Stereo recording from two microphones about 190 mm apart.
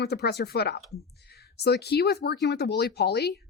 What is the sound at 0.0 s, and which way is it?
Speech, 60° left (ahead or behind).